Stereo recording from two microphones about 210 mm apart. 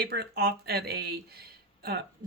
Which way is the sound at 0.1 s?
50° right (ahead or behind).